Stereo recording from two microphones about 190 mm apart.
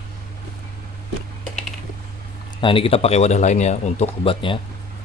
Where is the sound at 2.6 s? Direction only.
30° left (ahead or behind).